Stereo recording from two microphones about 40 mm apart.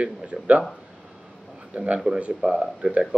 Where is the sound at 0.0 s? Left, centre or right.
Right.